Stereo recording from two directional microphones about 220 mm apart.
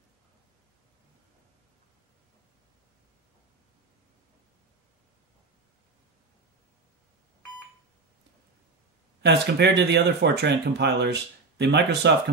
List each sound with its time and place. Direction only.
9.2 s speech: 50° right (ahead or behind)